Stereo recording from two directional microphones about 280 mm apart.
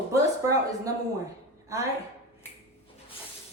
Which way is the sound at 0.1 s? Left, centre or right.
Centre.